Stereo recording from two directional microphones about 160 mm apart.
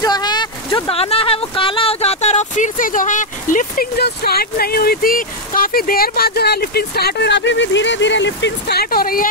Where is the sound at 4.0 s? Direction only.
75° left (ahead or behind).